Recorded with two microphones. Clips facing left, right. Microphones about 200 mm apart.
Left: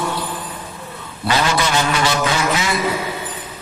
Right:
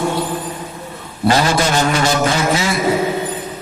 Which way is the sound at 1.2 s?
45° right (ahead or behind).